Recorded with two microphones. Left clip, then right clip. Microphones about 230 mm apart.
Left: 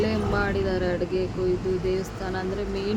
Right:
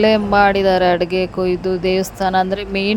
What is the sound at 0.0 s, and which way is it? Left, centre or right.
Speech, right.